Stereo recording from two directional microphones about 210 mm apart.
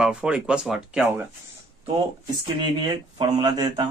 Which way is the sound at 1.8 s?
20° right (ahead or behind).